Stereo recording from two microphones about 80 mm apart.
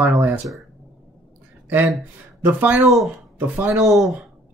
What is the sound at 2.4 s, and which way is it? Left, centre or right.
Speech, right.